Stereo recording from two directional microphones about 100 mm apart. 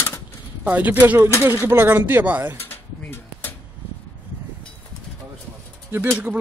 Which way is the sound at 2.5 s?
20° left (ahead or behind).